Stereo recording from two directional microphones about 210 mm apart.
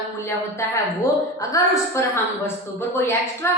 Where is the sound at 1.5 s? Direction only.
15° left (ahead or behind).